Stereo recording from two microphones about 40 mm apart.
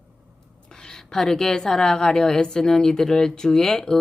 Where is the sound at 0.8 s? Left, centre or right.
Centre.